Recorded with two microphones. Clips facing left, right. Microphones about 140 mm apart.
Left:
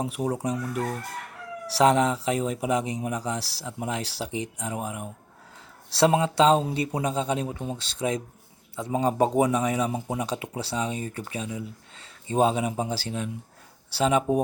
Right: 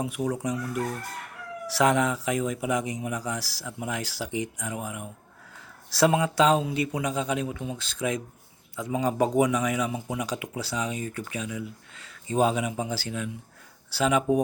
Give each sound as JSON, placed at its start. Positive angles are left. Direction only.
{"t": 0.0, "sound": "speech", "side_deg": 35}